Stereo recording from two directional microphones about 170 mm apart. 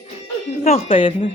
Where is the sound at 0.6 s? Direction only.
35° left (ahead or behind).